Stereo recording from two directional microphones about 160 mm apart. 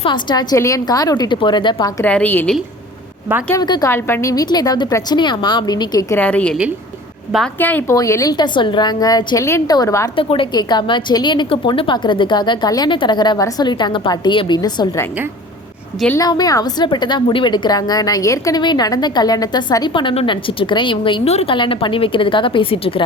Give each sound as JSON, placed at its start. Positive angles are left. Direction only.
{"t": 0.0, "sound": "a woman's voice", "side_deg": 30}
{"t": 2.0, "sound": "speech", "side_deg": 10}
{"t": 3.5, "sound": "a woman's voice", "side_deg": 25}
{"t": 6.1, "sound": "a woman's voice", "side_deg": 10}
{"t": 10.2, "sound": "a woman's voice", "side_deg": 35}
{"t": 16.1, "sound": "a woman's voice", "side_deg": 25}